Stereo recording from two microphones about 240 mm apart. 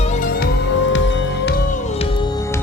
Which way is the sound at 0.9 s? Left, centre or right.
Left.